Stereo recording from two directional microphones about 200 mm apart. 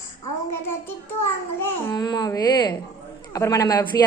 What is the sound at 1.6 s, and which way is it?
A woman's voice, 10° left (ahead or behind).